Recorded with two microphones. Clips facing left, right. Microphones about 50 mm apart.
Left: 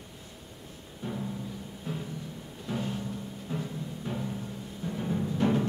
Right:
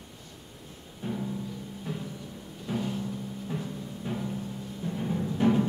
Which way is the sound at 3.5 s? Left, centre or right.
Centre.